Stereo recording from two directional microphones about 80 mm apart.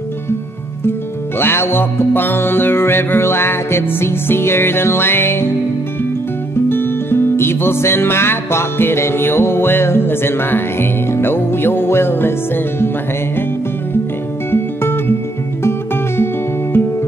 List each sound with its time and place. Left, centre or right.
1.4 s music: left
6.5 s music: left
14.5 s music: left
16.7 s music: left